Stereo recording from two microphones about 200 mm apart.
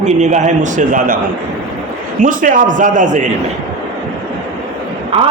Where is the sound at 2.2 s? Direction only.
40° right (ahead or behind).